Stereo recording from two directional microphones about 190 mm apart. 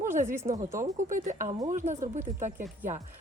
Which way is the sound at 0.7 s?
15° right (ahead or behind).